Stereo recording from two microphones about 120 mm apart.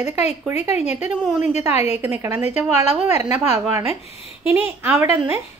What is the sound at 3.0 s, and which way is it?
A woman's voice, 20° right (ahead or behind).